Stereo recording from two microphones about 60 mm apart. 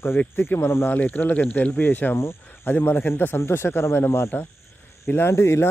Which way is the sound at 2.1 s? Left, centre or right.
Left.